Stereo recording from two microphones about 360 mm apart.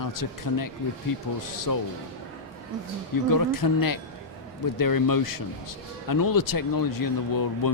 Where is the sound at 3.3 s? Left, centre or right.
Left.